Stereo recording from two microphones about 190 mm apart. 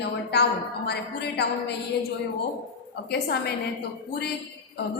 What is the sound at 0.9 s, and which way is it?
Speech, 60° left (ahead or behind).